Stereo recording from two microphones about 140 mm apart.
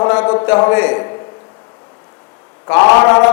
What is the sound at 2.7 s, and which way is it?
Mantra, 25° left (ahead or behind).